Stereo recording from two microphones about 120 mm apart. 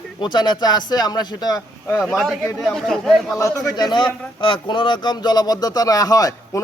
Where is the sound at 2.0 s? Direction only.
Centre (ahead or behind).